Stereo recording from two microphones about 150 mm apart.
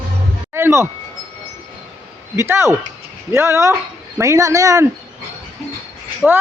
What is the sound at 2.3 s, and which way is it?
Speech, 15° right (ahead or behind).